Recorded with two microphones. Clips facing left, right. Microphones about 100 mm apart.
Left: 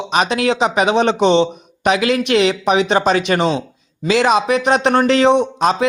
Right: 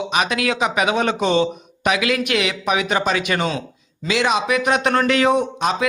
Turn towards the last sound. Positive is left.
turn(degrees=35)  # may be behind; listen again after turning